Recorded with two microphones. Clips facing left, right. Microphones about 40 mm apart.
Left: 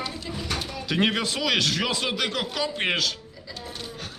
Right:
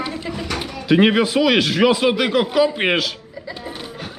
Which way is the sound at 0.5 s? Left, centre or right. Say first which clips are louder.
Right 10 dB; centre.